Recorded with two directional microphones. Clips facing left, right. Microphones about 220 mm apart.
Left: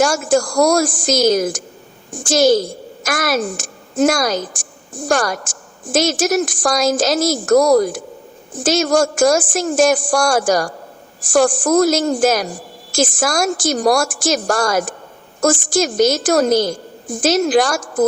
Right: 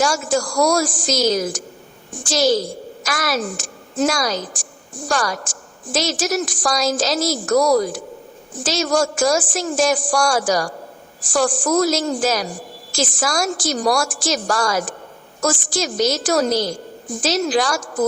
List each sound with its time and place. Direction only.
0.0 s a woman's voice: 50° left (ahead or behind)